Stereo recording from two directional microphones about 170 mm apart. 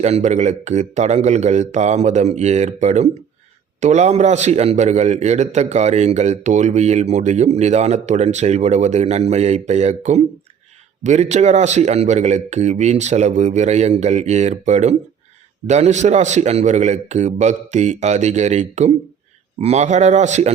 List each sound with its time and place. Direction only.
0.0 s a man's voice: 45° right (ahead or behind)